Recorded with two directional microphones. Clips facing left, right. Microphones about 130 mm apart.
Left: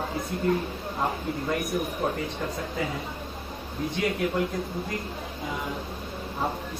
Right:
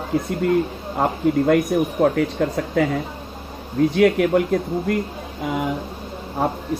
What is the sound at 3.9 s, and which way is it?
Speech, 65° right (ahead or behind).